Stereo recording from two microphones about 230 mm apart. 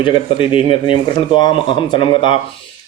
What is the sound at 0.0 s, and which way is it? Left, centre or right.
Mantra, left.